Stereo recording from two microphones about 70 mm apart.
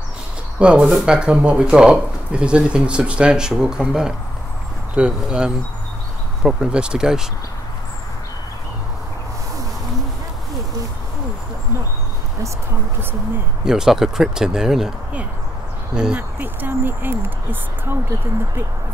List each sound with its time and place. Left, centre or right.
0.6 s speech: centre
13.7 s speech: centre
15.9 s speech: centre
16.2 s speech: right